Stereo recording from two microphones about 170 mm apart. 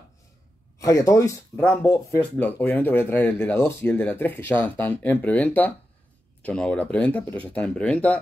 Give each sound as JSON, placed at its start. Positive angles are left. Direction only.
{"t": 0.7, "sound": "speech", "side_deg": 20}